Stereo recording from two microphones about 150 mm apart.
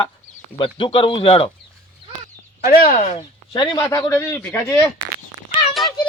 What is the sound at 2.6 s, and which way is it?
Speech, 65° left (ahead or behind).